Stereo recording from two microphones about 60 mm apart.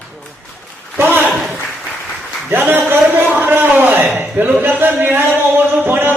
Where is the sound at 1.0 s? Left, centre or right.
Right.